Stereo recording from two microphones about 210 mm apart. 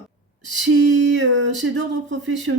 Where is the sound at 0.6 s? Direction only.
60° right (ahead or behind).